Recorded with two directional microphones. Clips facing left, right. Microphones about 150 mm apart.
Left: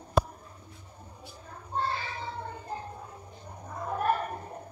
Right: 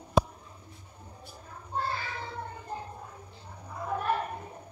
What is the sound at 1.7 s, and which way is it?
Child singing, 30° left (ahead or behind).